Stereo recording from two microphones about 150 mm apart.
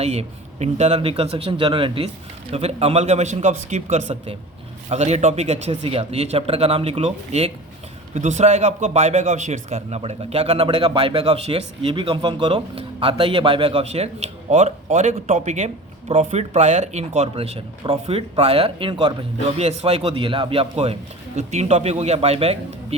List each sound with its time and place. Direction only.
0.0 s a man's voice: 45° right (ahead or behind)
19.5 s a man's voice: 45° right (ahead or behind)